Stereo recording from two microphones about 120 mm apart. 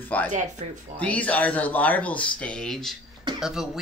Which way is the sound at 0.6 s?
65° right (ahead or behind).